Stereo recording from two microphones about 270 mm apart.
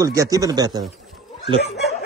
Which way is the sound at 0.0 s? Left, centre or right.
Centre.